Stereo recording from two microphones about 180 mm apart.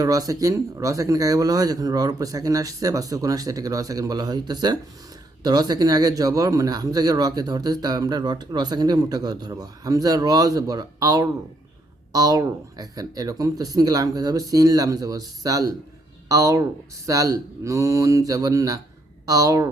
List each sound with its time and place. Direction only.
0.0 s speech: 20° right (ahead or behind)